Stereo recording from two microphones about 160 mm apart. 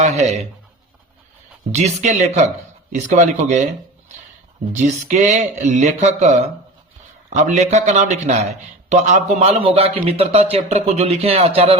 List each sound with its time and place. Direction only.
0.0 s speech: 45° right (ahead or behind)
1.7 s speech: 45° right (ahead or behind)
4.7 s a man's voice: 50° right (ahead or behind)